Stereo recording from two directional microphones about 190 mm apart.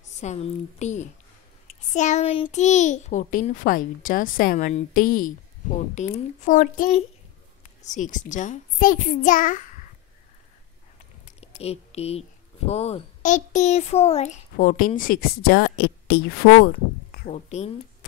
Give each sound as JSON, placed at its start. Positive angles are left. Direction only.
{"t": 0.2, "sound": "a child's voice", "side_deg": 35}
{"t": 11.4, "sound": "speech", "side_deg": 30}
{"t": 14.6, "sound": "a child's voice", "side_deg": 45}
{"t": 17.3, "sound": "a child's voice", "side_deg": 35}